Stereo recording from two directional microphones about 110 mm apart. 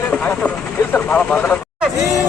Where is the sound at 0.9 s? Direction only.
15° left (ahead or behind).